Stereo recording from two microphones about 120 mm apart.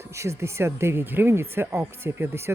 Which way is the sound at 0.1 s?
25° right (ahead or behind).